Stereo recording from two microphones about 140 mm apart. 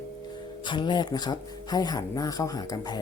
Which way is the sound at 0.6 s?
35° left (ahead or behind).